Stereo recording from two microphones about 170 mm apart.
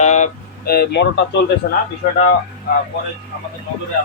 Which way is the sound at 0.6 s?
65° left (ahead or behind).